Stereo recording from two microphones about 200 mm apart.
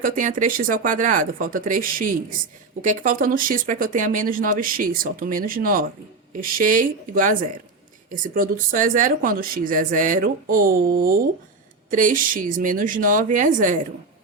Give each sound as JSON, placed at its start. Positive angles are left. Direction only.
{"t": 0.0, "sound": "speech", "side_deg": -40}